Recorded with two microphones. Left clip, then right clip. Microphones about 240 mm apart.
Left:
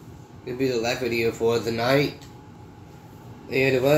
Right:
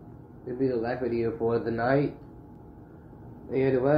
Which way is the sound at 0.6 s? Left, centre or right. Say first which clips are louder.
Left 4 dB; centre.